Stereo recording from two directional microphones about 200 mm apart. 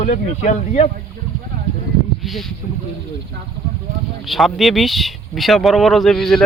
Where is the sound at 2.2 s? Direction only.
Centre (ahead or behind).